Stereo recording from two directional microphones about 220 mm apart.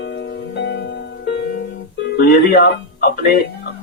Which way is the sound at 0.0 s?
50° left (ahead or behind).